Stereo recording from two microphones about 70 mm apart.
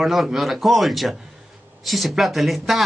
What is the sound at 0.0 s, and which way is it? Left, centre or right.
Speech, centre.